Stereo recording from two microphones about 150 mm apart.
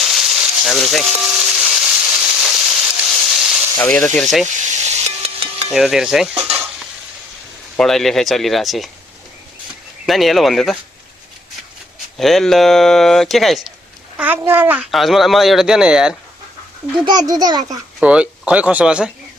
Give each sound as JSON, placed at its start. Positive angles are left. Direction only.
{"t": 0.0, "sound": "frying", "side_deg": 0}
{"t": 1.1, "sound": "a sound", "side_deg": -5}
{"t": 5.7, "sound": "speech", "side_deg": -5}
{"t": 6.3, "sound": "stir", "side_deg": -40}
{"t": 7.8, "sound": "speech", "side_deg": 0}
{"t": 10.1, "sound": "speech", "side_deg": 0}
{"t": 12.1, "sound": "speech", "side_deg": 0}
{"t": 14.2, "sound": "speech", "side_deg": -15}
{"t": 14.8, "sound": "speech", "side_deg": 0}
{"t": 17.1, "sound": "a child's voice", "side_deg": -25}
{"t": 18.0, "sound": "speech", "side_deg": -10}